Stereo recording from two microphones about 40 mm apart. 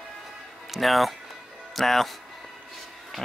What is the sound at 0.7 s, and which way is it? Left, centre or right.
Speech, centre.